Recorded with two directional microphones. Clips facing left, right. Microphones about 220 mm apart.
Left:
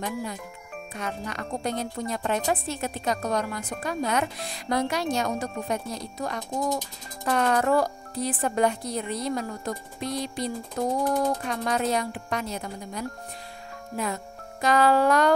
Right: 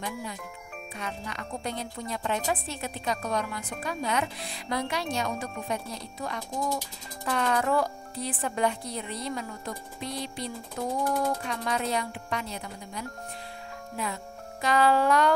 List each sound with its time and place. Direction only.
0.0 s speech: 45° left (ahead or behind)